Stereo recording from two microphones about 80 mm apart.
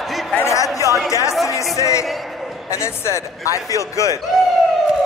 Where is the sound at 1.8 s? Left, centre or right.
Left.